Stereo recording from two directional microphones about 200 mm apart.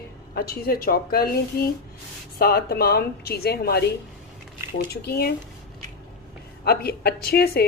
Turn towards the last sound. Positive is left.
turn(degrees=50)  # may be behind; listen again after turning